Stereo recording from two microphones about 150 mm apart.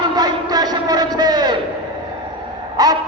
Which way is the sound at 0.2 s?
25° right (ahead or behind).